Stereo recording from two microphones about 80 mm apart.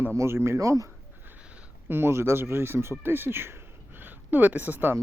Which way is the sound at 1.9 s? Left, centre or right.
Right.